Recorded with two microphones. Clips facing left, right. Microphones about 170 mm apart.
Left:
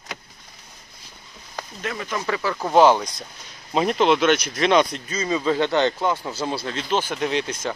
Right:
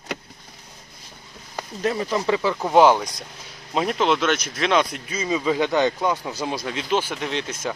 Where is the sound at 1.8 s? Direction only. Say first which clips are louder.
Right 6 dB; 30° right (ahead or behind); by 3.0 s 10° right (ahead or behind).